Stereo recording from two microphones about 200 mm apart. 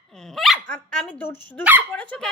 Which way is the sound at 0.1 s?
Centre (ahead or behind).